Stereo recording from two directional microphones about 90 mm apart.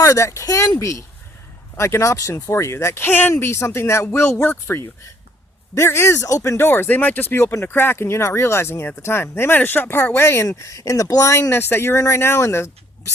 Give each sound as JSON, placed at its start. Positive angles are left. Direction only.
{"t": 0.0, "sound": "speech", "side_deg": 35}